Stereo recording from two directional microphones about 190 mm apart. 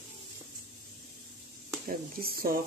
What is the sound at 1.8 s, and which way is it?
Speech, 50° right (ahead or behind).